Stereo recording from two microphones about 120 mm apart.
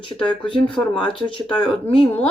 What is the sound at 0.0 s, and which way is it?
Speech, 45° left (ahead or behind).